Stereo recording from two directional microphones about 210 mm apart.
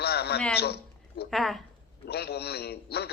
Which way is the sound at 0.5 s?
50° left (ahead or behind).